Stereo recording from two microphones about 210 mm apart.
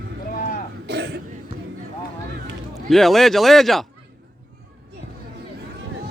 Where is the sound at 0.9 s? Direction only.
50° right (ahead or behind).